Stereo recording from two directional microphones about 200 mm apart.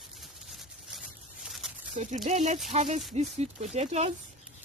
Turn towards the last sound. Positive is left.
turn(degrees=-35)  # may be behind; listen again after turning